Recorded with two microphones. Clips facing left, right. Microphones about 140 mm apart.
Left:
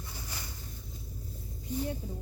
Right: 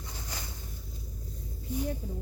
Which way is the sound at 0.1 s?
15° right (ahead or behind).